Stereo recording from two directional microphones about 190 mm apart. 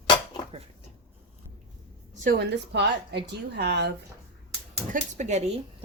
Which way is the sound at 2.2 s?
55° right (ahead or behind).